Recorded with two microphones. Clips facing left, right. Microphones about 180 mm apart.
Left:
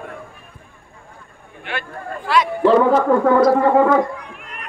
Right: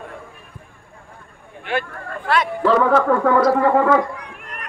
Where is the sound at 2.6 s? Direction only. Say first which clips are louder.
Left 3 dB; 20° left (ahead or behind).